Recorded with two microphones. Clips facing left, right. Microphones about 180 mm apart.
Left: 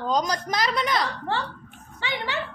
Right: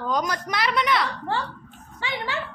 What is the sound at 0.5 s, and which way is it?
Speech, 40° left (ahead or behind).